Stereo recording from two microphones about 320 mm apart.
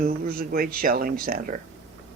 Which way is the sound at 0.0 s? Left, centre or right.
Right.